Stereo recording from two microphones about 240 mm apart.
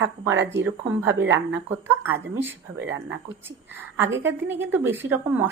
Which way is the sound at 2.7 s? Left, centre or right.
Right.